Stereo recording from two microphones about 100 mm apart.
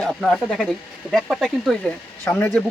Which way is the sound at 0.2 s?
5° left (ahead or behind).